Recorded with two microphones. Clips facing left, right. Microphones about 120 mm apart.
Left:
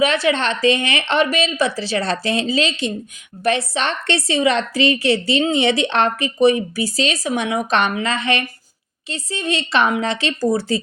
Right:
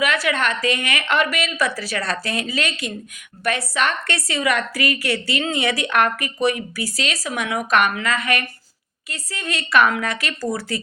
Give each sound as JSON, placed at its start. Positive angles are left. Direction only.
{"t": 0.0, "sound": "a woman's voice", "side_deg": 25}